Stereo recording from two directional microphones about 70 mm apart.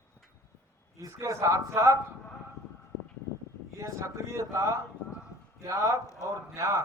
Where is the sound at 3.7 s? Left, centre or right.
Right.